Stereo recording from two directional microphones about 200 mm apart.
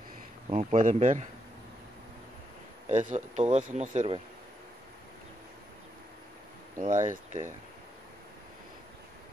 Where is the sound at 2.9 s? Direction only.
40° right (ahead or behind).